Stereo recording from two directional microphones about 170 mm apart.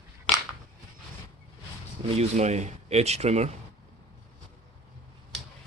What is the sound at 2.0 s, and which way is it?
Speech, 40° right (ahead or behind).